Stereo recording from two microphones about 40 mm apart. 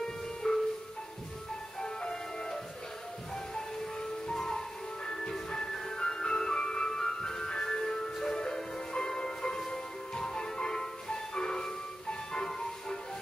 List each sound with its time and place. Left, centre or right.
0.4 s music: left
1.8 s music: centre
3.5 s music: centre